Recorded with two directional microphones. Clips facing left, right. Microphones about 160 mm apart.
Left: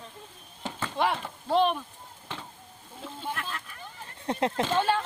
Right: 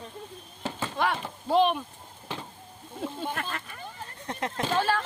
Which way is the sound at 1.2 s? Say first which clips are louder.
Right 4 dB; 5° right (ahead or behind).